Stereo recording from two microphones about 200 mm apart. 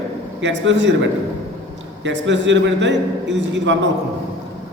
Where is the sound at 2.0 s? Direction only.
65° right (ahead or behind).